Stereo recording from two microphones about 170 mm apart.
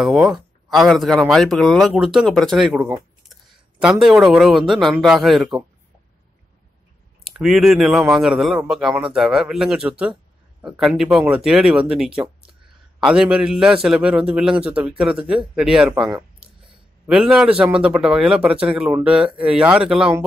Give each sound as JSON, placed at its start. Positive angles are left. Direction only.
{"t": 0.0, "sound": "speech", "side_deg": -5}
{"t": 7.2, "sound": "speech", "side_deg": 0}
{"t": 13.0, "sound": "speech", "side_deg": -5}
{"t": 17.1, "sound": "speech", "side_deg": -5}